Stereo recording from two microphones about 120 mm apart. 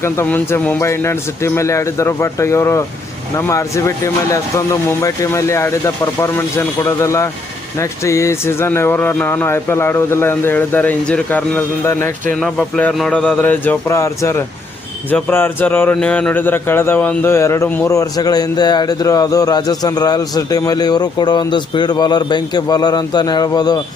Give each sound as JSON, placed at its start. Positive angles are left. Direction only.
{"t": 0.0, "sound": "a man's voice", "side_deg": 20}
{"t": 12.3, "sound": "a man's voice", "side_deg": 5}
{"t": 17.9, "sound": "a man's voice", "side_deg": 30}